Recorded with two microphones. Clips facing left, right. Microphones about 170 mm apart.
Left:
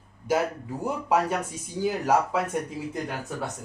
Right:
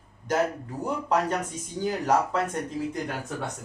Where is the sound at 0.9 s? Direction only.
10° left (ahead or behind).